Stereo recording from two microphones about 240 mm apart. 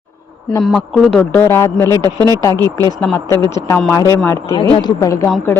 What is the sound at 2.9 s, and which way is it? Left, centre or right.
Speech, centre.